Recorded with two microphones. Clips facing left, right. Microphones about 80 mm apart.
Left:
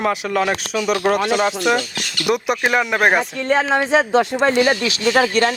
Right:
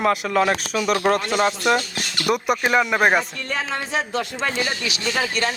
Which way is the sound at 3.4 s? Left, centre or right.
Left.